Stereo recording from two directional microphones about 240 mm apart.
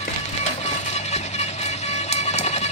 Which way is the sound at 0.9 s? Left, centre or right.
Left.